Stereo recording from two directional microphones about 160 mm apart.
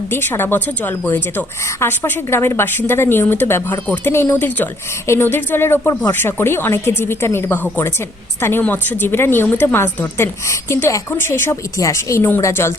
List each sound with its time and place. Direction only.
0.1 s a woman's voice: 15° left (ahead or behind)